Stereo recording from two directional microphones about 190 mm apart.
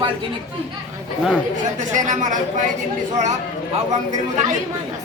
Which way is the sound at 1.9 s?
40° right (ahead or behind).